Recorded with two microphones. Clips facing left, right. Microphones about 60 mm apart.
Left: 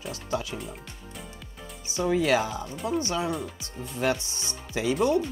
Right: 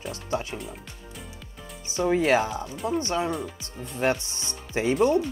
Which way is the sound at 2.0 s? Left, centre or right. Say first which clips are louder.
Right 2 dB; right.